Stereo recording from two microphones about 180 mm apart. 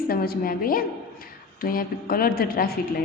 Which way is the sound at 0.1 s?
55° left (ahead or behind).